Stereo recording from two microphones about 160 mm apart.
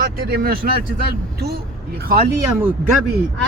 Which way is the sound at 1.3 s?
85° right.